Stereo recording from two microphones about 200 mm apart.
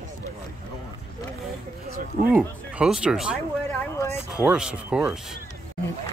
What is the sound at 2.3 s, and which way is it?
Speech, 5° right (ahead or behind).